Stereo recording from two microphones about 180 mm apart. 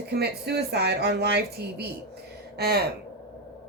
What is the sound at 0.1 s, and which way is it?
A woman's voice, 65° right (ahead or behind).